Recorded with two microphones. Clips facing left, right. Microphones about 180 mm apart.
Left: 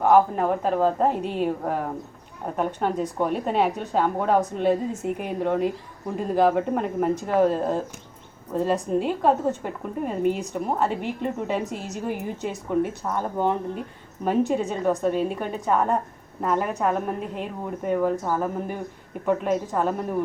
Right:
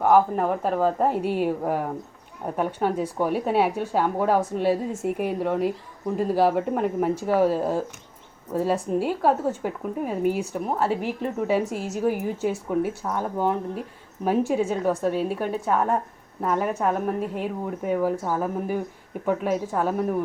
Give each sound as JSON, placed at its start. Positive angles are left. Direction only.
{"t": 0.0, "sound": "a woman's voice", "side_deg": -5}